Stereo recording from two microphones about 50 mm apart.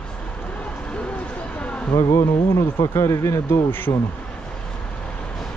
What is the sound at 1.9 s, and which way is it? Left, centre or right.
Speech, left.